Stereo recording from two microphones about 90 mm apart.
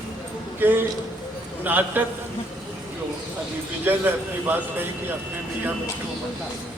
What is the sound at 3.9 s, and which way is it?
A man's voice, 20° right (ahead or behind).